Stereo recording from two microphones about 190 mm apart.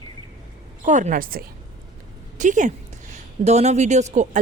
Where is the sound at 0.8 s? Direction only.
40° right (ahead or behind).